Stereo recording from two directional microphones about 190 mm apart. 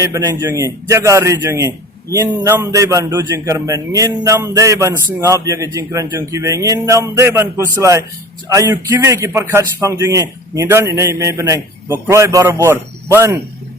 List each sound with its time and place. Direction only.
0.0 s a man's voice: 15° right (ahead or behind)